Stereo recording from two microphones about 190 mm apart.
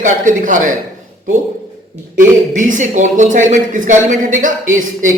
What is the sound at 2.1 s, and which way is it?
A man's voice, 45° right (ahead or behind).